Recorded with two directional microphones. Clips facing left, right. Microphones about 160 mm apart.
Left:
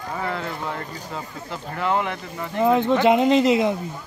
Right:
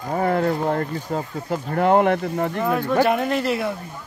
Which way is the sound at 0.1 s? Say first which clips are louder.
Right 9 dB; 45° right (ahead or behind).